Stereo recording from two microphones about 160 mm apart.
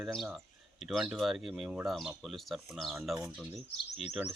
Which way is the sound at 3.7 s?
40° left (ahead or behind).